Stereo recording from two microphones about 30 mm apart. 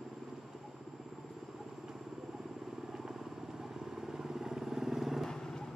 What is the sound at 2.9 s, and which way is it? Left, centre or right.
Vehicle, centre.